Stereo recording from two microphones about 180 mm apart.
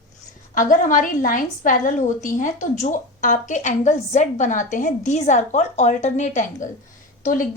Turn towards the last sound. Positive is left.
turn(degrees=45)  # may be behind; listen again after turning